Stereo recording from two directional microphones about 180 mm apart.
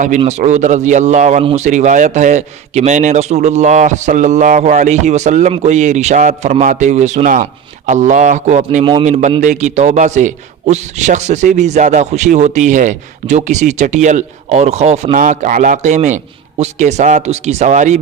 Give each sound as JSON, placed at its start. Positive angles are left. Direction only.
{"t": 0.2, "sound": "a man's voice", "side_deg": -40}
{"t": 8.8, "sound": "a man's voice", "side_deg": -30}
{"t": 9.0, "sound": "a man's voice", "side_deg": -40}